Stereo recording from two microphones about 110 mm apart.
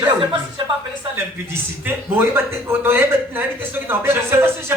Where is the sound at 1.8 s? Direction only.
20° right (ahead or behind).